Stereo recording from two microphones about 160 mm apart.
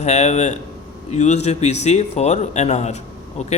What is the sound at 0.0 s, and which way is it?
A man's voice, 45° left (ahead or behind).